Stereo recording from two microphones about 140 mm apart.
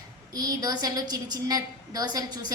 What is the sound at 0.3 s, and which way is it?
A woman's voice, 30° right (ahead or behind).